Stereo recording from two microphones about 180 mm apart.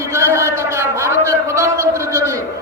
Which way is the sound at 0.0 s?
15° right (ahead or behind).